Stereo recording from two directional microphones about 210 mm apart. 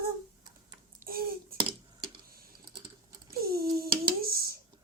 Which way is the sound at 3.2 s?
45° right (ahead or behind).